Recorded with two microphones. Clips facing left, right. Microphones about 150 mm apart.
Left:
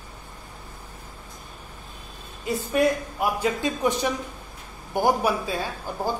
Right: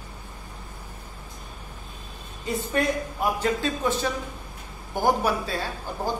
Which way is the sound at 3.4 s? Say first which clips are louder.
Left 1 dB; 15° left (ahead or behind).